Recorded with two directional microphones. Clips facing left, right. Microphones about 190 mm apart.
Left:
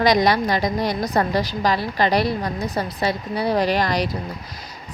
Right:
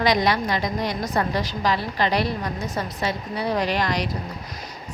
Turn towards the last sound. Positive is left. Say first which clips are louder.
# left 4 dB
turn(degrees=35)  # may be behind; listen again after turning